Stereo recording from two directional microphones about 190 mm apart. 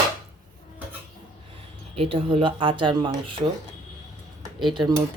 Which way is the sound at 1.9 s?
30° right (ahead or behind).